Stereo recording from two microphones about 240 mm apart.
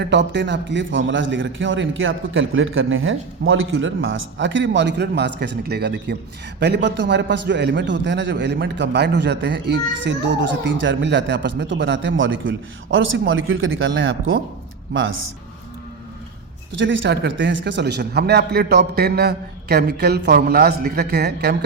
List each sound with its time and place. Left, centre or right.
0.0 s a man's voice: right
16.7 s a man's voice: right